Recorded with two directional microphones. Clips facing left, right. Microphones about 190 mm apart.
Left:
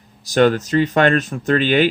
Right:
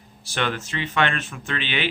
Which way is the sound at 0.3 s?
40° left (ahead or behind).